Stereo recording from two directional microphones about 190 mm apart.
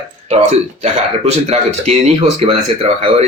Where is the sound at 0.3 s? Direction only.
35° right (ahead or behind).